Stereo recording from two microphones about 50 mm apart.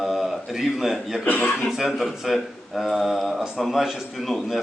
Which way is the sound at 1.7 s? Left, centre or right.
Centre.